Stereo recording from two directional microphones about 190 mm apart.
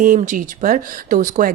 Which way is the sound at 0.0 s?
45° right (ahead or behind).